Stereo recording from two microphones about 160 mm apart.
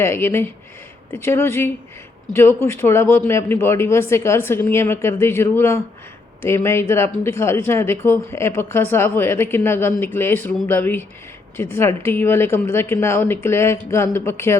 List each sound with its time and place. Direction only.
0.0 s speech: 15° left (ahead or behind)